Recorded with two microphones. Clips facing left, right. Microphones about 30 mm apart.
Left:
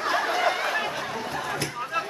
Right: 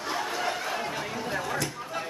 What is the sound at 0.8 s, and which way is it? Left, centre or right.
Chatter, centre.